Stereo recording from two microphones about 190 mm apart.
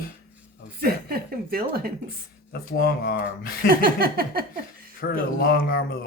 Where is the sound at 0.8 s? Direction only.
55° right (ahead or behind).